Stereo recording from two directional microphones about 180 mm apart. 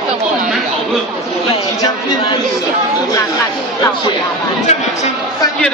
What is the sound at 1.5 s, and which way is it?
Speech, 30° left (ahead or behind).